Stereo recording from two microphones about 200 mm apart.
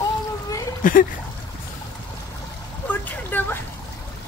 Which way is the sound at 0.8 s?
40° left (ahead or behind).